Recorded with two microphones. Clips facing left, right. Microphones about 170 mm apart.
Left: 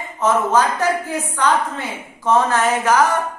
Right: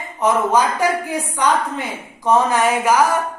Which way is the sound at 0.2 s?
15° right (ahead or behind).